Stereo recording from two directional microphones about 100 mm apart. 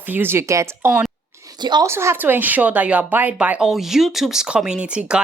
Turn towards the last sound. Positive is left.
turn(degrees=-10)  # may be behind; listen again after turning